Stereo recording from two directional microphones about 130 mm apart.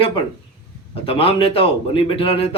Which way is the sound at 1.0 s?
45° left (ahead or behind).